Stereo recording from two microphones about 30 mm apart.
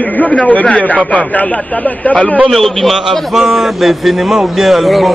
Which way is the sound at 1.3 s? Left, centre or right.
Left.